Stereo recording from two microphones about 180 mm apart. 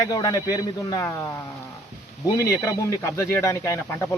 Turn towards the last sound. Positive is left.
turn(degrees=10)  # may be behind; listen again after turning